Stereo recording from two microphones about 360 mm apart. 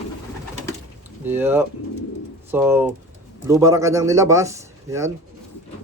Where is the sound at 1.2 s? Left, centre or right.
Centre.